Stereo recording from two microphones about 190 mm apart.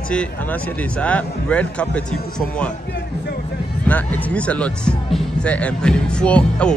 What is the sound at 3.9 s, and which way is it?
Speech, 10° left (ahead or behind).